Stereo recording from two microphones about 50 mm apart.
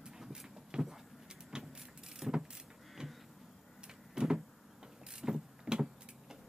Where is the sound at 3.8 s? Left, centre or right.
Centre.